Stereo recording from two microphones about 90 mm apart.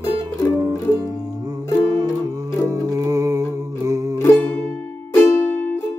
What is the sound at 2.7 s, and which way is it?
Music, 40° right (ahead or behind).